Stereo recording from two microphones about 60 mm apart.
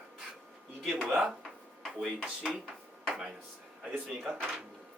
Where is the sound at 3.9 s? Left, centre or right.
Right.